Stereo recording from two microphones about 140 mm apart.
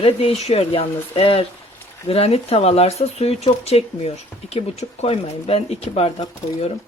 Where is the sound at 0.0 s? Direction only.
45° left (ahead or behind).